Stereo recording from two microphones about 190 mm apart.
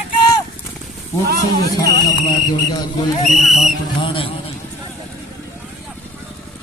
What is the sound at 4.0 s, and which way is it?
Speech, 25° left (ahead or behind).